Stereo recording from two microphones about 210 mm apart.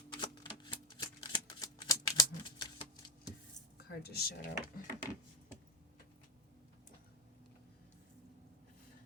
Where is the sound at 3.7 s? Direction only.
50° left (ahead or behind).